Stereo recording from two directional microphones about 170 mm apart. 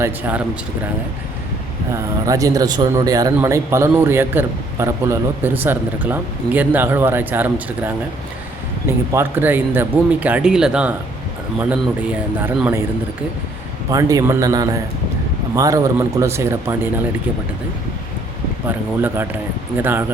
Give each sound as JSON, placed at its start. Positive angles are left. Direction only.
{"t": 0.0, "sound": "a man's voice", "side_deg": -10}
{"t": 1.9, "sound": "a man's voice", "side_deg": -20}
{"t": 9.1, "sound": "a man's voice", "side_deg": -10}
{"t": 13.9, "sound": "a man's voice", "side_deg": -20}
{"t": 19.0, "sound": "a man's voice", "side_deg": -10}